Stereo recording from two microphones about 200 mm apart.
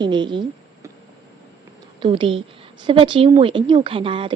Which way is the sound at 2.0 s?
25° right (ahead or behind).